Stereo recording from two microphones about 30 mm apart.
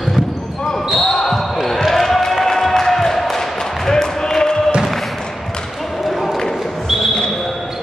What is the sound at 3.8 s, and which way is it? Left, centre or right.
Basketball bounce, centre.